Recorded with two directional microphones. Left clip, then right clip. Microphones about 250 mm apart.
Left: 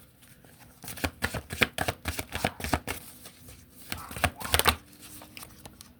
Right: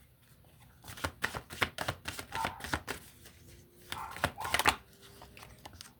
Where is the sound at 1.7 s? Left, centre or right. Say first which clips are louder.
Left 6 dB; centre.